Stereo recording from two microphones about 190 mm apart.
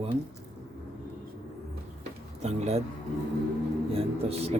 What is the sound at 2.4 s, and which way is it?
Speech, 35° right (ahead or behind).